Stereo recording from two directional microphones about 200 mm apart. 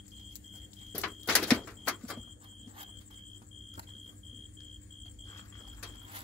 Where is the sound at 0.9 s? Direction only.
5° left (ahead or behind).